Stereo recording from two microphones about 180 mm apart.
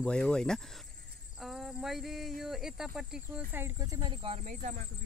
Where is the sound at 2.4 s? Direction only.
Centre (ahead or behind); by 4.4 s 25° right (ahead or behind).